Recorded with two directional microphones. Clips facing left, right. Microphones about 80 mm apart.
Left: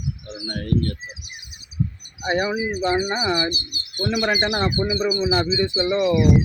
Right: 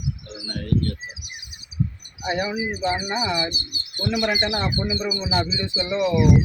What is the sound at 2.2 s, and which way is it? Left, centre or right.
Speech, left.